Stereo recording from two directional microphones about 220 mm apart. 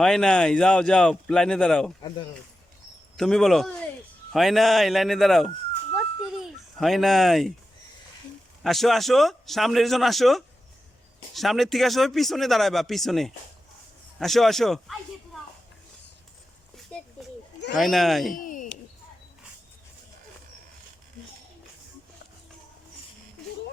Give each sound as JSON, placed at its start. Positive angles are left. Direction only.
{"t": 0.0, "sound": "speech", "side_deg": 5}
{"t": 3.2, "sound": "speech", "side_deg": 0}
{"t": 5.9, "sound": "a sound", "side_deg": 0}
{"t": 8.6, "sound": "speech", "side_deg": 0}
{"t": 17.7, "sound": "speech", "side_deg": 0}
{"t": 18.3, "sound": "a sound", "side_deg": 40}